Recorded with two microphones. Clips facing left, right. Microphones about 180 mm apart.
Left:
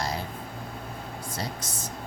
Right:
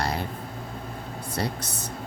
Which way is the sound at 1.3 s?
65° right (ahead or behind).